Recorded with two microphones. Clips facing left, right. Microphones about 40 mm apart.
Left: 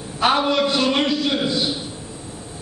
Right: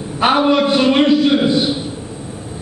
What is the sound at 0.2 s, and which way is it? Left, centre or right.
A man's voice, centre.